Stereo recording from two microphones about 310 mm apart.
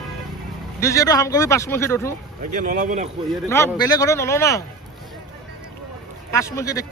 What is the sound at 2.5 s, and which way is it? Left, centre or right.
Speech, right.